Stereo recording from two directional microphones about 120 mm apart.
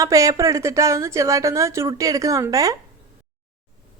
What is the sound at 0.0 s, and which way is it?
A woman's voice, 25° right (ahead or behind).